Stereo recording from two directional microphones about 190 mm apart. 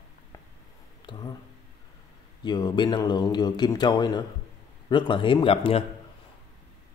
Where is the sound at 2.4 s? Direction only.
20° left (ahead or behind).